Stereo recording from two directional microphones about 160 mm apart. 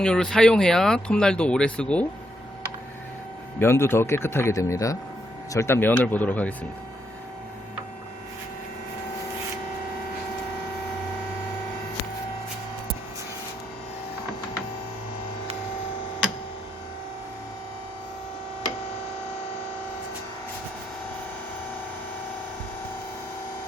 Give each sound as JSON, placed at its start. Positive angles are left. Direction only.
{"t": 0.0, "sound": "speech", "side_deg": 5}
{"t": 3.6, "sound": "speech", "side_deg": 15}